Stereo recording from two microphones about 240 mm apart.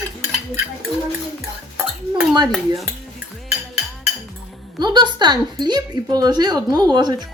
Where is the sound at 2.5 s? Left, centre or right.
Centre.